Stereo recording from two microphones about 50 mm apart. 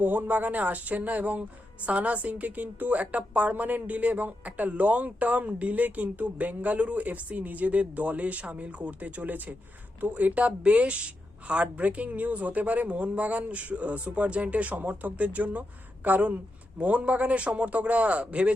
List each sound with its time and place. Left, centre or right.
0.0 s a woman's voice: right